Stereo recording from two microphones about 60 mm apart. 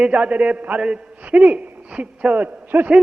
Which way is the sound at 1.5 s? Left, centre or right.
Right.